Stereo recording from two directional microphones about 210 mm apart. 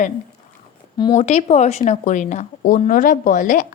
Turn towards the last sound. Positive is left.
turn(degrees=40)  # may be behind; listen again after turning